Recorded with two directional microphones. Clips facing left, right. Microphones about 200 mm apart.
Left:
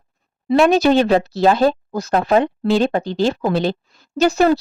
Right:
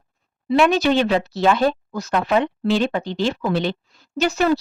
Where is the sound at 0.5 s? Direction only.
40° left (ahead or behind).